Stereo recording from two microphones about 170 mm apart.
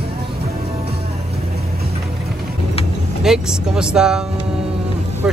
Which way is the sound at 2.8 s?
35° left (ahead or behind).